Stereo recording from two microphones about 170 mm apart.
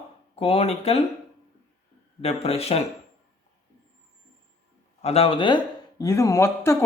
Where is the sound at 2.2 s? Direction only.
35° left (ahead or behind).